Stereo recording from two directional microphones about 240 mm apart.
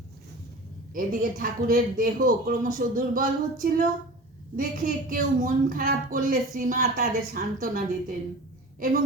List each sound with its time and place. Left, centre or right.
0.9 s a woman's voice: right